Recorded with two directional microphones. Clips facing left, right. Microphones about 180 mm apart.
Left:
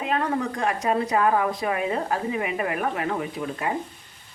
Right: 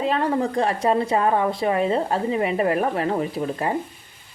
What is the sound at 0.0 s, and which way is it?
A woman's voice, 30° right (ahead or behind).